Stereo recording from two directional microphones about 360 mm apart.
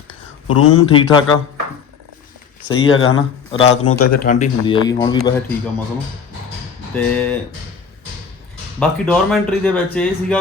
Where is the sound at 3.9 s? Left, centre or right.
Left.